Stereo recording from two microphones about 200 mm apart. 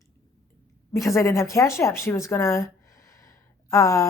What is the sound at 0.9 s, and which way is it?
Speech, 15° left (ahead or behind).